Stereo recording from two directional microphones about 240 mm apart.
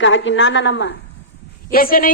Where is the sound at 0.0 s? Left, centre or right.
Left.